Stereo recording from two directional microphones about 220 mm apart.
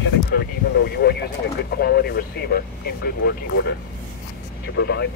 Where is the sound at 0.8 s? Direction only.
45° left (ahead or behind).